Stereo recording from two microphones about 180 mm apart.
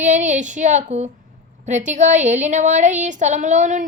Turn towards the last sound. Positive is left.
turn(degrees=-40)  # may be behind; listen again after turning